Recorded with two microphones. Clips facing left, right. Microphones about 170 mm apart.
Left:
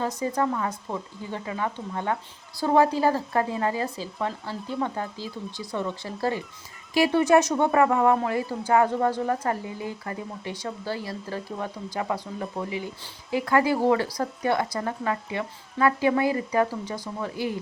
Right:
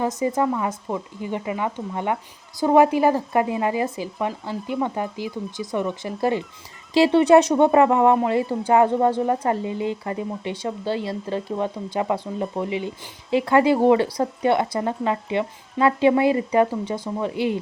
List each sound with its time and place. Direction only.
0.0 s speech: 20° right (ahead or behind)